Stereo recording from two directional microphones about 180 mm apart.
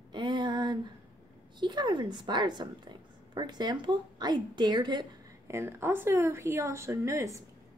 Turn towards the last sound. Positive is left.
turn(degrees=-15)  # may be behind; listen again after turning